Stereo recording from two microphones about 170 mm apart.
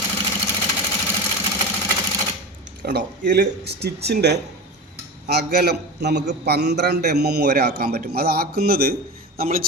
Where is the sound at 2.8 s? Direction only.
70° right (ahead or behind).